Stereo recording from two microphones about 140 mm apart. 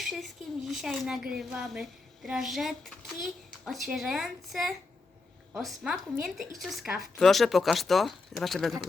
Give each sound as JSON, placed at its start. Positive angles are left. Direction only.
{"t": 0.0, "sound": "speech", "side_deg": 0}